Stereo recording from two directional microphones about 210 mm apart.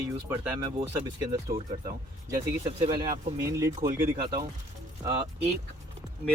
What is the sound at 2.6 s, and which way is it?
Speech, 25° right (ahead or behind).